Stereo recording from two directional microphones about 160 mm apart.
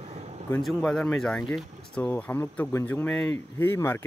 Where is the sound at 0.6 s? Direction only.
5° left (ahead or behind).